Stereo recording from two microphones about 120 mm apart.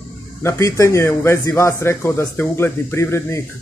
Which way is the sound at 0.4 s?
25° left (ahead or behind).